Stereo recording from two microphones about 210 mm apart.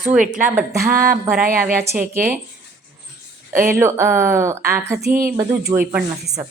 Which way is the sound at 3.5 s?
40° right (ahead or behind).